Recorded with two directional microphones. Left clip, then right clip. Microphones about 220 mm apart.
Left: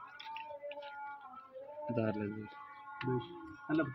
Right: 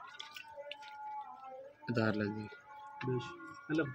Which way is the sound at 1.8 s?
40° right (ahead or behind).